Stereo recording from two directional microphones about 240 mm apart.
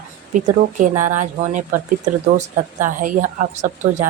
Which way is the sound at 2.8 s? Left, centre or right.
Right.